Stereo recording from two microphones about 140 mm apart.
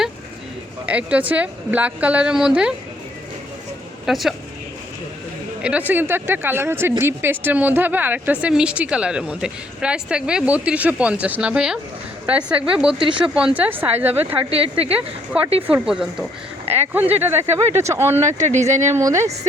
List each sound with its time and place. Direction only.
0.9 s speech: 10° right (ahead or behind)
4.0 s speech: centre (ahead or behind)
5.6 s speech: 10° right (ahead or behind)
13.0 s speech: 35° right (ahead or behind)
13.2 s speech: 5° right (ahead or behind)
15.6 s speech: 5° right (ahead or behind)
18.3 s speech: 55° right (ahead or behind)
18.9 s a woman's voice: 20° right (ahead or behind)